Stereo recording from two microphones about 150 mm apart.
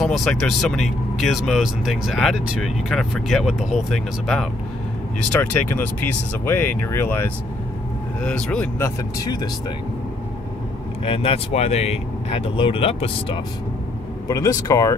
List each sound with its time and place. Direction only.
0.0 s speech: 5° left (ahead or behind)
11.1 s speech: 40° left (ahead or behind)
14.2 s speech: 20° left (ahead or behind)